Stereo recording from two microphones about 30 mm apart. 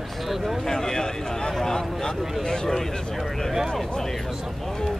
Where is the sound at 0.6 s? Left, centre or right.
Centre.